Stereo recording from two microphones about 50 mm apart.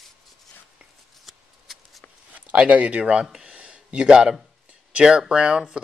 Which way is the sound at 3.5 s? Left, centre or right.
Centre.